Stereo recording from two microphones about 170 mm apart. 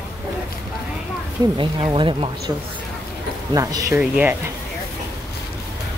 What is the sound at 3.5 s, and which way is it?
Speech, 20° right (ahead or behind).